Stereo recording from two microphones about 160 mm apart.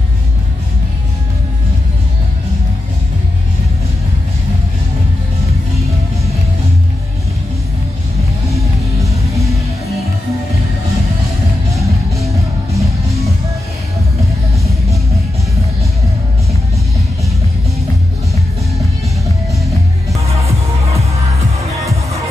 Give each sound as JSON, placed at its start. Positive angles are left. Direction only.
{"t": 8.5, "sound": "music", "side_deg": -20}
{"t": 11.8, "sound": "music", "side_deg": -20}
{"t": 14.6, "sound": "music", "side_deg": -20}